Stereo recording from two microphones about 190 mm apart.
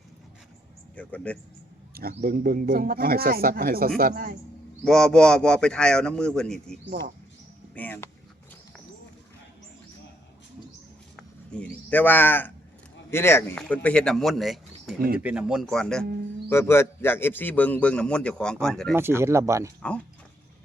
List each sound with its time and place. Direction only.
0.9 s a man's voice: 5° left (ahead or behind)
2.0 s speech: 50° right (ahead or behind)
4.8 s a man's voice: 5° left (ahead or behind)
7.8 s a man's voice: 10° left (ahead or behind)
11.2 s a man's voice: 5° left (ahead or behind)
14.9 s speech: 50° right (ahead or behind)
15.2 s a man's voice: 5° right (ahead or behind)
18.9 s speech: 10° right (ahead or behind)